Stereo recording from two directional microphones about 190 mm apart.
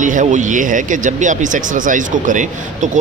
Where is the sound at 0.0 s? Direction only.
40° right (ahead or behind).